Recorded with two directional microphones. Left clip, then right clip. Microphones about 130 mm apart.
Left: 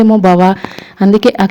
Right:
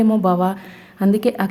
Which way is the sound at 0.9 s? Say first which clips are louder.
Left 9 dB; 40° left (ahead or behind).